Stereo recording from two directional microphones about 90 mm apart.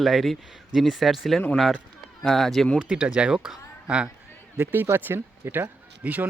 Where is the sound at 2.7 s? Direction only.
10° right (ahead or behind).